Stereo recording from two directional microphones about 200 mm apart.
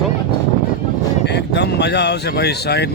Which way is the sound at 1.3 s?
55° left (ahead or behind).